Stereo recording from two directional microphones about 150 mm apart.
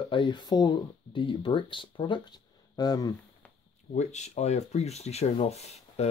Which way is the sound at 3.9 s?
50° left (ahead or behind).